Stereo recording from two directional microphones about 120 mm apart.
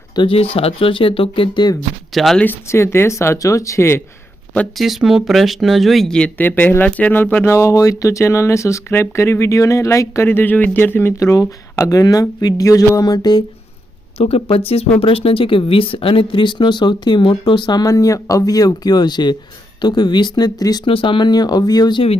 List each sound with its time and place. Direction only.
0.2 s speech: 50° left (ahead or behind)
2.1 s speech: centre (ahead or behind)
2.4 s speech: 20° left (ahead or behind)
4.8 s speech: centre (ahead or behind); by 13.4 s 35° left (ahead or behind)
14.2 s speech: 55° left (ahead or behind); by 20.8 s 35° left (ahead or behind)
20.8 s speech: 45° left (ahead or behind)